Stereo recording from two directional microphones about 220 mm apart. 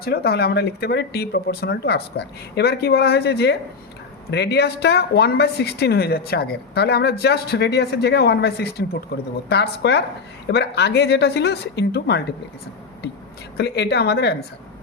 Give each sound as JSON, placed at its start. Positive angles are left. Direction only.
{"t": 0.0, "sound": "a woman's voice", "side_deg": 45}
{"t": 13.6, "sound": "a woman's voice", "side_deg": 50}